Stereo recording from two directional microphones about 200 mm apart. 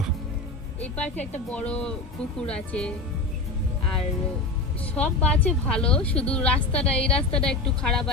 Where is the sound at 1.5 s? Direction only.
5° left (ahead or behind).